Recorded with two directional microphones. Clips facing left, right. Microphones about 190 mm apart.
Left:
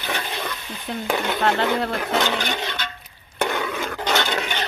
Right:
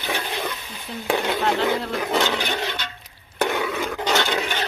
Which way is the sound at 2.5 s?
Centre (ahead or behind).